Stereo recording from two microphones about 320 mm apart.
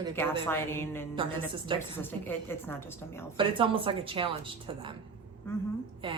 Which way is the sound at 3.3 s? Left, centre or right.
Centre.